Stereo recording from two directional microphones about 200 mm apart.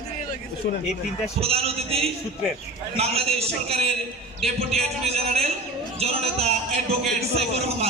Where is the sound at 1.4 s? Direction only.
30° right (ahead or behind).